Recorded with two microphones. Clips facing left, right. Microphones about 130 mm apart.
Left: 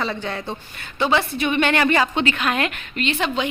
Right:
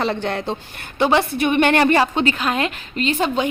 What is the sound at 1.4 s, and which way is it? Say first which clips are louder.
A woman's voice: right 4 dB; 50° right (ahead or behind).